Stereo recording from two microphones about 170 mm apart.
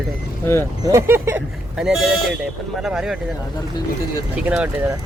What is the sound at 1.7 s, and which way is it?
Speech, centre (ahead or behind).